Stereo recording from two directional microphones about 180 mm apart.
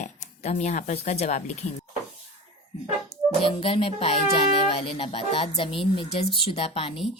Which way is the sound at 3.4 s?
30° left (ahead or behind).